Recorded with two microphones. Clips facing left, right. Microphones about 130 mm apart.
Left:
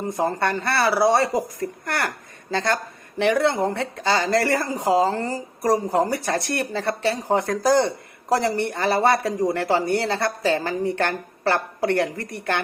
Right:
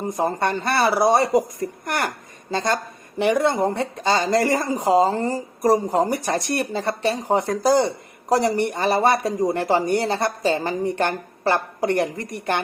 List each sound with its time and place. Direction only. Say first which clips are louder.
0.1 s speech: right 1 dB; 20° right (ahead or behind)